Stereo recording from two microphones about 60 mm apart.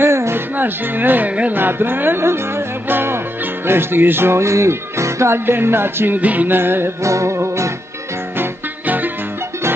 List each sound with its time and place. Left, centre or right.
0.0 s music: right
0.6 s speech: right
1.5 s music: right
3.6 s speech: right
7.0 s music: right
8.4 s music: right